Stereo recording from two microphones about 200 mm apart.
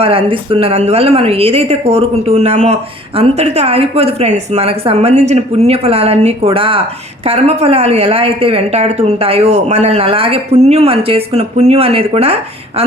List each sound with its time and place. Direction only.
0.0 s a woman's voice: 30° right (ahead or behind)